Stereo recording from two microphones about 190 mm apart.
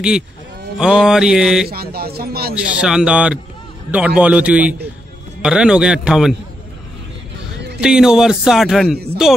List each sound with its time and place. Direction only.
0.7 s speech: 5° right (ahead or behind)
1.7 s speech: 55° right (ahead or behind)
2.5 s a man's voice: 5° right (ahead or behind)
7.8 s speech: 5° right (ahead or behind)